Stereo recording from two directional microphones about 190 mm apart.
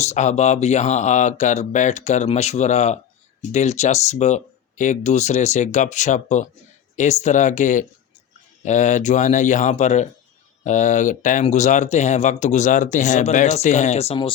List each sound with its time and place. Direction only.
0.0 s speech: 35° left (ahead or behind)